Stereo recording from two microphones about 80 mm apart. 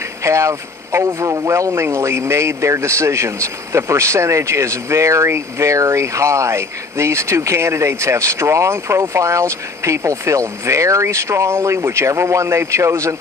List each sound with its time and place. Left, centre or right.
0.2 s speech: right